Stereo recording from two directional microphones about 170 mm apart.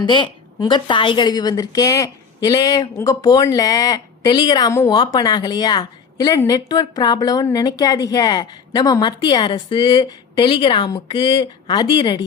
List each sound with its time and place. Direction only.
0.0 s a woman's voice: 25° left (ahead or behind)